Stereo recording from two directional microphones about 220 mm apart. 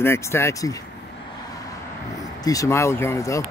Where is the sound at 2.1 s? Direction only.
15° left (ahead or behind).